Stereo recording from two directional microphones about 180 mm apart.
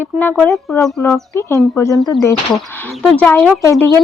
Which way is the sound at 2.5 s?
Centre (ahead or behind).